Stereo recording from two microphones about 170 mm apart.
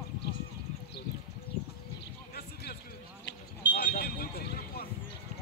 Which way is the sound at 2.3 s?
70° left (ahead or behind).